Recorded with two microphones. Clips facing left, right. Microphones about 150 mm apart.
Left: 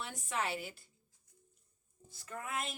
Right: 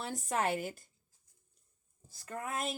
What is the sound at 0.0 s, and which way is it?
Speech, 40° right (ahead or behind).